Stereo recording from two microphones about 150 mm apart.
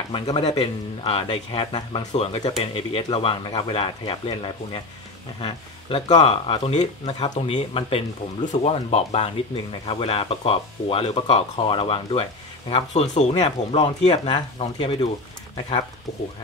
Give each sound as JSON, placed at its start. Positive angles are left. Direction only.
{"t": 0.1, "sound": "speech", "side_deg": 40}
{"t": 13.3, "sound": "speech", "side_deg": 40}